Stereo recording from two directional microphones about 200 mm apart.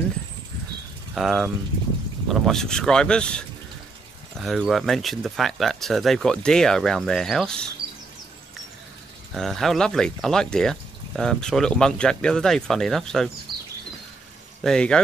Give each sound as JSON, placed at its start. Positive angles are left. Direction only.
{"t": 1.1, "sound": "speech", "side_deg": 0}
{"t": 7.8, "sound": "a sound", "side_deg": -50}
{"t": 9.3, "sound": "speech", "side_deg": 0}
{"t": 14.6, "sound": "speech", "side_deg": 5}